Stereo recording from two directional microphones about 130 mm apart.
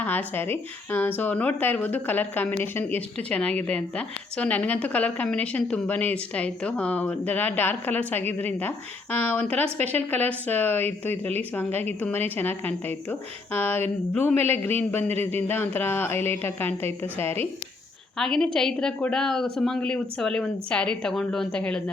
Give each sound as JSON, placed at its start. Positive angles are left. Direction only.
{"t": 0.0, "sound": "speech", "side_deg": 15}
{"t": 15.1, "sound": "a man's voice", "side_deg": -55}
{"t": 15.4, "sound": "speech", "side_deg": 15}
{"t": 18.2, "sound": "a woman's voice", "side_deg": 5}